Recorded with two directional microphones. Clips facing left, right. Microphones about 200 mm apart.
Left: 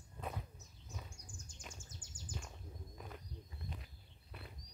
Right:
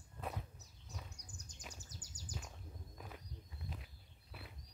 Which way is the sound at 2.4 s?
Centre (ahead or behind).